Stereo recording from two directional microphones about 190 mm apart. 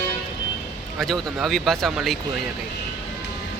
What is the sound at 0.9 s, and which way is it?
Speech, centre (ahead or behind).